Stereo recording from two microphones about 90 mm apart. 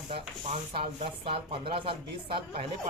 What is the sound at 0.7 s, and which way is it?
Speech, 90° right.